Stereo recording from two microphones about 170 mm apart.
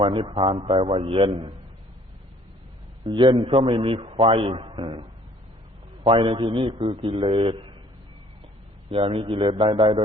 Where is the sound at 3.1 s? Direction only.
25° right (ahead or behind).